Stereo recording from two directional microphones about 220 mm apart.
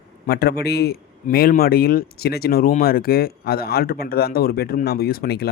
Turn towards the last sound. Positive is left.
turn(degrees=45)  # may be behind; listen again after turning